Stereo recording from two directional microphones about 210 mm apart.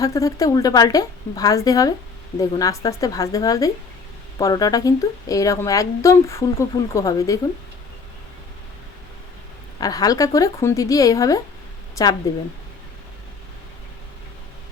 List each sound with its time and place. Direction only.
0.0 s a woman's voice: 15° left (ahead or behind)
9.8 s a woman's voice: 15° left (ahead or behind)